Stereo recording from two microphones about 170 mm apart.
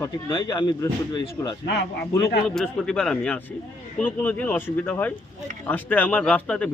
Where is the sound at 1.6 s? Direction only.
80° left.